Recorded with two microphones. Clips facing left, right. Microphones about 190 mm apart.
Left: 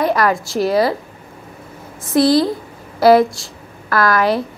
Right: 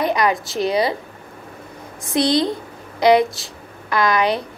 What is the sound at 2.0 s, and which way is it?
Speech, 5° left (ahead or behind).